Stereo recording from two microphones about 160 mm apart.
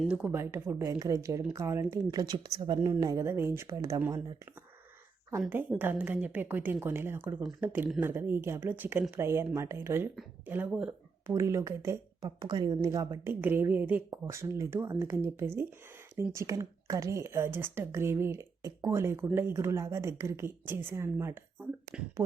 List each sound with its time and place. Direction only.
0.0 s speech: 5° right (ahead or behind); by 4.4 s 25° right (ahead or behind)
5.5 s speech: 10° right (ahead or behind)
13.4 s speech: 10° right (ahead or behind)